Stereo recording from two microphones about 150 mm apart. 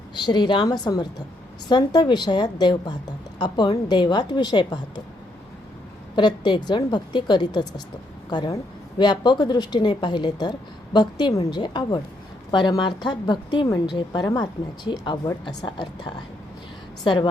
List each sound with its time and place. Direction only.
0.1 s a woman's voice: 30° left (ahead or behind)
6.1 s a woman's voice: 30° left (ahead or behind)